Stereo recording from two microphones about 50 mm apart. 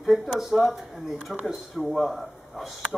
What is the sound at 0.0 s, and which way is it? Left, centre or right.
Speech, centre.